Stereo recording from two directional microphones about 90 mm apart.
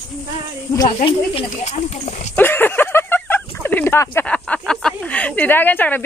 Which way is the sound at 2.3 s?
20° left (ahead or behind).